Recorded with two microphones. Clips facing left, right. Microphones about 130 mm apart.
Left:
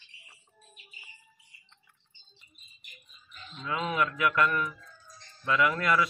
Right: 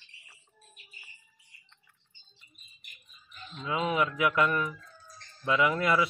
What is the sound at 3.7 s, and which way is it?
Speech, 15° right (ahead or behind).